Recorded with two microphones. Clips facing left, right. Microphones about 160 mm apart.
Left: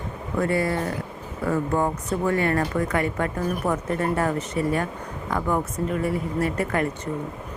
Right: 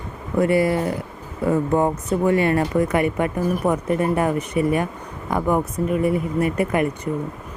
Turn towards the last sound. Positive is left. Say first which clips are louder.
# right 4 dB
turn(degrees=-20)  # may be behind; listen again after turning